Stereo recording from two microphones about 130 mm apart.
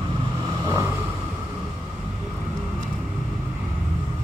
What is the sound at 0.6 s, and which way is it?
Vehicle, 25° right (ahead or behind).